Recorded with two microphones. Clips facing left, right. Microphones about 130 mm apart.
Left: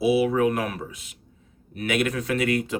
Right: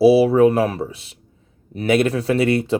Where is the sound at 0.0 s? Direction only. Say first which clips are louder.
Right 8 dB; 30° right (ahead or behind).